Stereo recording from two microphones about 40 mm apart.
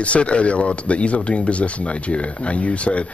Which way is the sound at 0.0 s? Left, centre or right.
Left.